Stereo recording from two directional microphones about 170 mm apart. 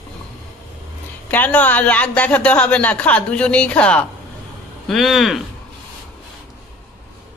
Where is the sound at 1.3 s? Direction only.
10° left (ahead or behind).